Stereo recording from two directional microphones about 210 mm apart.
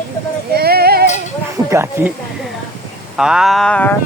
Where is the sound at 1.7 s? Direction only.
10° right (ahead or behind).